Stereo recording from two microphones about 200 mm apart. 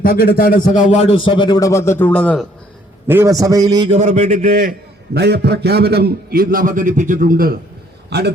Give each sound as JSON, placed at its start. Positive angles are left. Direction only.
{"t": 0.0, "sound": "a man's voice", "side_deg": 50}
{"t": 3.1, "sound": "a man's voice", "side_deg": -15}
{"t": 3.8, "sound": "a man's voice", "side_deg": -35}
{"t": 5.1, "sound": "a man's voice", "side_deg": -55}